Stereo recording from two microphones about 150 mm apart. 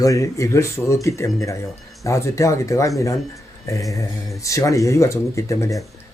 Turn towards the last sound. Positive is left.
turn(degrees=20)  # may be behind; listen again after turning